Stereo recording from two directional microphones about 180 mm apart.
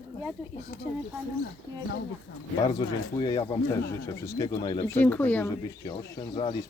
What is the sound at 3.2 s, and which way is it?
Speech, 25° left (ahead or behind).